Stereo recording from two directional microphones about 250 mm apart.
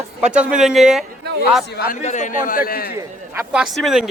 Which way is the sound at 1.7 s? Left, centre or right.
Left.